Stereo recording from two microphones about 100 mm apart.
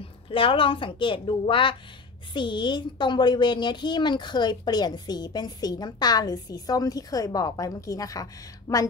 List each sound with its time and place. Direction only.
0.3 s a woman's voice: 60° left (ahead or behind); by 8.8 s 35° left (ahead or behind)